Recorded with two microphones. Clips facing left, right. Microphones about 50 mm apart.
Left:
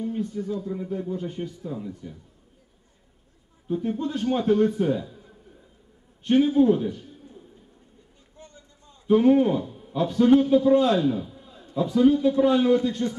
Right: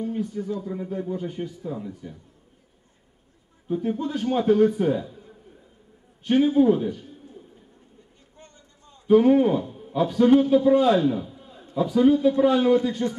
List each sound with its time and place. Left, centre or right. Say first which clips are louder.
0.0 s speech: right 1 dB; centre
0.4 s speech: even; right
0.7 s a man's voice: right 1 dB; centre
3.6 s a man's voice: right 1 dB; centre
6.2 s a man's voice: even; centre
8.4 s a sound: left 2 dB; right
9.0 s a man's voice: right 1 dB; centre
9.6 s a sound: right 2 dB; right
10.0 s a man's voice: even; centre; by 11.7 s right
11.9 s a man's voice: right 1 dB; centre